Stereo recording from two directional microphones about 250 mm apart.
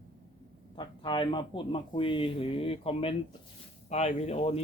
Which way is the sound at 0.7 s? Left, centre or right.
Centre.